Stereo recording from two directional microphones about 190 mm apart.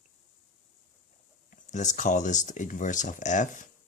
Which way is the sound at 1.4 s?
40° left (ahead or behind).